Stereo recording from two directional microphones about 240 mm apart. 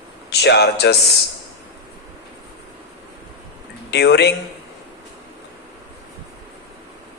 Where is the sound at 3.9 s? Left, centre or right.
Left.